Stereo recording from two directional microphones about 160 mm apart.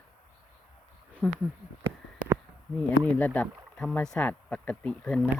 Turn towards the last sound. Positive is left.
turn(degrees=5)  # may be behind; listen again after turning